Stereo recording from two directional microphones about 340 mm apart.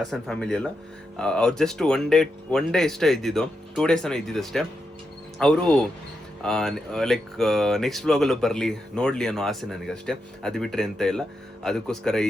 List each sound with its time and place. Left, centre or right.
0.0 s speech: centre